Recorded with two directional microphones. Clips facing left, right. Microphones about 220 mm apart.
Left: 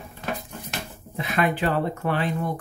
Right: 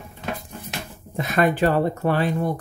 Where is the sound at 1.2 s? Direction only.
40° right (ahead or behind).